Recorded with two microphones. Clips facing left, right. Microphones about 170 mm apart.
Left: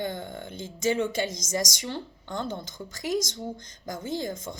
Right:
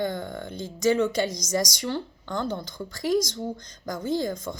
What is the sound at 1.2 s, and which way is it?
A woman's voice, 20° left (ahead or behind).